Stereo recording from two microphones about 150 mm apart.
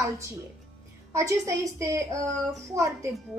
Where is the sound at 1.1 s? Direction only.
20° right (ahead or behind).